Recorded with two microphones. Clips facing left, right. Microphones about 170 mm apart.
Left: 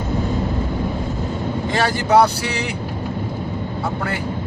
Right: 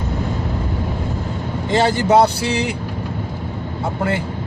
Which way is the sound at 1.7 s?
25° right (ahead or behind).